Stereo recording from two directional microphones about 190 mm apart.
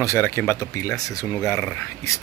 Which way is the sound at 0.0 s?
15° left (ahead or behind).